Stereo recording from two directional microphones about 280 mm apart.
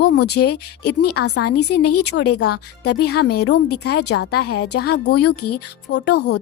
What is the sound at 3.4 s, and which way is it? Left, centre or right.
Speech, left.